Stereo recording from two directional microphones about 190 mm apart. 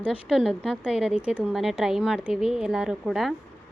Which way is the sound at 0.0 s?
Centre (ahead or behind).